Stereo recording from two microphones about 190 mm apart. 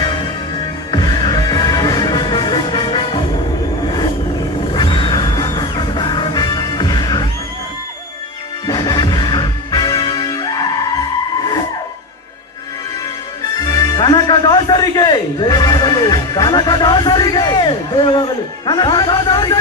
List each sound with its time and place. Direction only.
0.0 s music: 25° left (ahead or behind)
4.7 s music: 25° left (ahead or behind)
8.6 s music: 20° left (ahead or behind)
13.7 s music: 20° left (ahead or behind)